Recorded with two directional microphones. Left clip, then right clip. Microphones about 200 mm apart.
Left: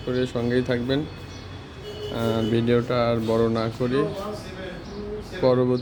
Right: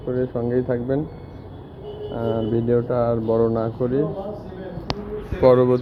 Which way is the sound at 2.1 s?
45° left (ahead or behind).